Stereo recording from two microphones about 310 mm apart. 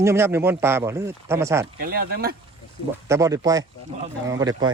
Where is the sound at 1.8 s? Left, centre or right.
Right.